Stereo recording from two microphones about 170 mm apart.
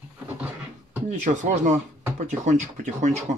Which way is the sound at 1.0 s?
45° right (ahead or behind).